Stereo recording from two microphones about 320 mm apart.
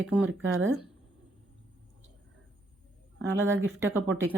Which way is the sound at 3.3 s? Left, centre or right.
Right.